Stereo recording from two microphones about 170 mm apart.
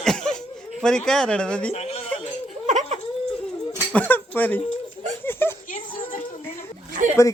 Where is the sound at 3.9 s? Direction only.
10° left (ahead or behind).